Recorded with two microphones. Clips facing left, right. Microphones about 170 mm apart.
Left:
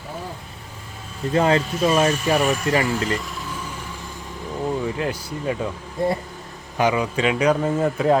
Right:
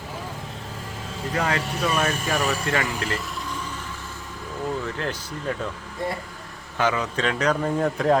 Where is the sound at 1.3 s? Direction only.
25° left (ahead or behind).